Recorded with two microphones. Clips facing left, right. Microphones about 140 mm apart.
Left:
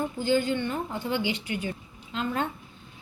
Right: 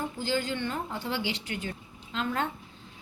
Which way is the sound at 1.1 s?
50° left (ahead or behind).